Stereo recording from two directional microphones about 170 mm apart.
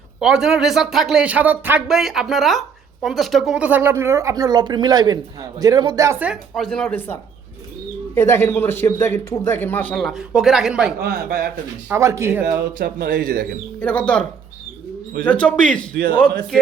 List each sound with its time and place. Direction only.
0.2 s a man's voice: 5° right (ahead or behind); by 9.9 s 10° left (ahead or behind)
9.9 s speech: centre (ahead or behind)
11.0 s speech: 65° right (ahead or behind)
11.9 s speech: 15° right (ahead or behind)
12.5 s speech: 60° right (ahead or behind)
13.7 s a man's voice: 5° left (ahead or behind)